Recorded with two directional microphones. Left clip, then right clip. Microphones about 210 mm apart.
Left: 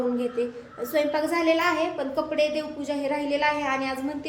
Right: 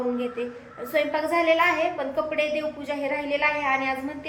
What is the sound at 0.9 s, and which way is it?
A woman's voice, 15° left (ahead or behind).